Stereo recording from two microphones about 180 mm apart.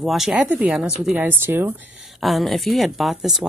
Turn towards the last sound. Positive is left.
turn(degrees=0)  # may be behind; listen again after turning